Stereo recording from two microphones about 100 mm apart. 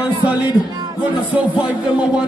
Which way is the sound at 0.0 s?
15° right (ahead or behind).